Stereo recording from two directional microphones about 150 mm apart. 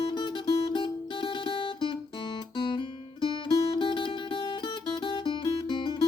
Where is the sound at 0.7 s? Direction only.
35° left (ahead or behind).